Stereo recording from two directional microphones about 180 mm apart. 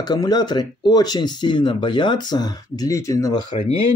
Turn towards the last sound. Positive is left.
turn(degrees=20)  # may be behind; listen again after turning